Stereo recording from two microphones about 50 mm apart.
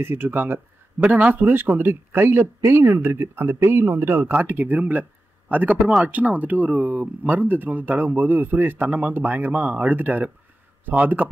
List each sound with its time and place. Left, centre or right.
0.0 s speech: right